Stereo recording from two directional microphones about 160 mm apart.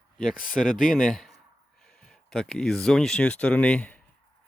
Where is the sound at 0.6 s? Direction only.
60° left (ahead or behind).